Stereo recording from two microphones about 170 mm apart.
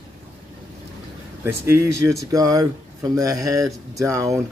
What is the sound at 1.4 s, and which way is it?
A man's voice, 15° right (ahead or behind).